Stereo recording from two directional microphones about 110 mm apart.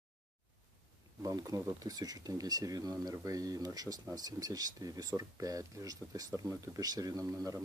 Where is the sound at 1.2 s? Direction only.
35° right (ahead or behind).